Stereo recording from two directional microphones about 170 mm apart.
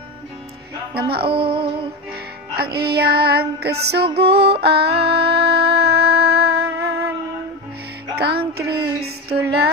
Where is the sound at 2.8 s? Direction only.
70° right (ahead or behind).